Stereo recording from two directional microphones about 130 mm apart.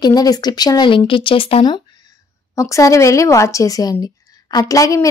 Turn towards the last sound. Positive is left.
turn(degrees=25)  # may be behind; listen again after turning